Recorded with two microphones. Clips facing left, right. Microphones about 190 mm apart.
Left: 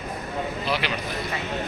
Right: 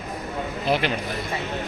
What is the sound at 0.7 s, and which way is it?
Speech, 50° right (ahead or behind).